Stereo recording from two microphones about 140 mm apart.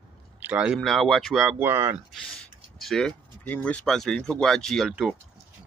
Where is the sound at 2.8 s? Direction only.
5° left (ahead or behind).